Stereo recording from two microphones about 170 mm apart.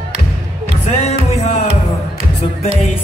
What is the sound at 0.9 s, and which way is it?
Music, 40° left (ahead or behind).